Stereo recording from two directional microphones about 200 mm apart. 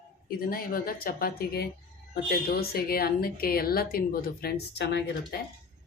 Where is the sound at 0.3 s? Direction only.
45° left (ahead or behind).